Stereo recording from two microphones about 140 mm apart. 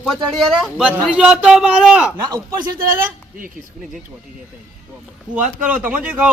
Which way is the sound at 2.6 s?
90° right.